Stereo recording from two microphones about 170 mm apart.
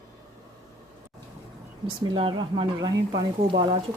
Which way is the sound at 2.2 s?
30° right (ahead or behind).